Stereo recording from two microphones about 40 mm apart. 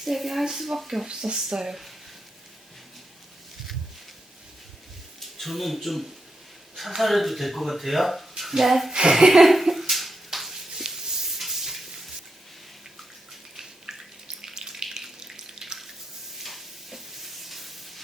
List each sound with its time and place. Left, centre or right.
0.0 s speech: centre
1.0 s speech: centre
5.4 s speech: centre
8.9 s speech: centre
9.5 s a sound: centre
10.8 s a sound: centre
13.6 s water: centre
14.8 s water tap: centre
16.4 s sizzle: centre